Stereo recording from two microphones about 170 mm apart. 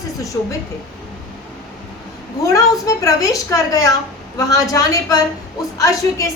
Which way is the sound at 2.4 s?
20° left (ahead or behind).